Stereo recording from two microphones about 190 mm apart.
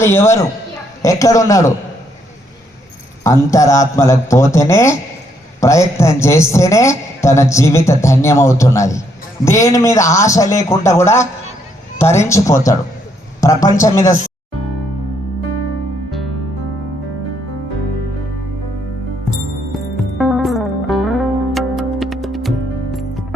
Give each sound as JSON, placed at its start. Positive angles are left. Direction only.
{"t": 0.0, "sound": "a man's voice", "side_deg": 15}
{"t": 3.2, "sound": "a man's voice", "side_deg": 15}
{"t": 20.1, "sound": "music", "side_deg": 0}